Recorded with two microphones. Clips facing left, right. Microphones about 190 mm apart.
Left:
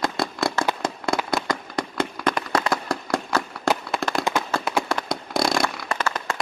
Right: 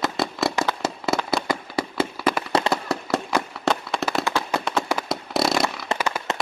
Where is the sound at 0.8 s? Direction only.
5° right (ahead or behind).